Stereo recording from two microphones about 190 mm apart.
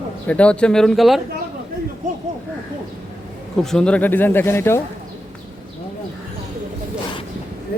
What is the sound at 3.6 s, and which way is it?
Speech, 5° left (ahead or behind).